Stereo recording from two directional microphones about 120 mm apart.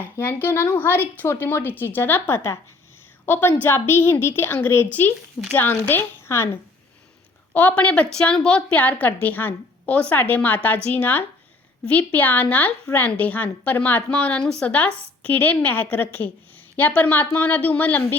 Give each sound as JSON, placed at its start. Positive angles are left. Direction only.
{"t": 0.0, "sound": "a woman's voice", "side_deg": 20}
{"t": 7.5, "sound": "a woman's voice", "side_deg": 15}